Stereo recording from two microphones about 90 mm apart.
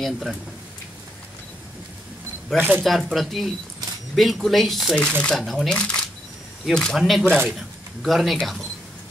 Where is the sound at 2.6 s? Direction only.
20° right (ahead or behind).